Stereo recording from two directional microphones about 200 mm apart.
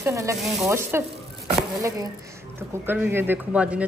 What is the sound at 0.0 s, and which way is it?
A woman's voice, 15° right (ahead or behind).